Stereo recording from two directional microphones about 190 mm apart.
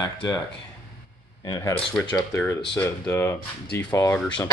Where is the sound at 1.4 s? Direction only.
20° left (ahead or behind).